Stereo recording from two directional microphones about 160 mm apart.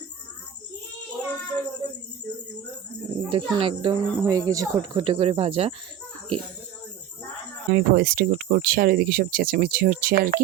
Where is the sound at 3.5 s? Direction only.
30° right (ahead or behind).